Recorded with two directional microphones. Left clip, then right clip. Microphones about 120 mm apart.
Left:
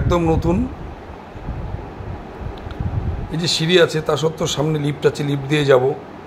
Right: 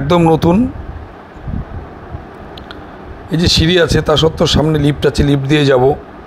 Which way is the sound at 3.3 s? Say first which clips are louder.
Right 4 dB; 60° right (ahead or behind).